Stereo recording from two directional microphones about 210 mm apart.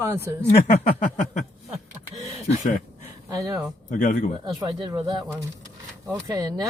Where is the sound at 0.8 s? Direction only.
35° left (ahead or behind).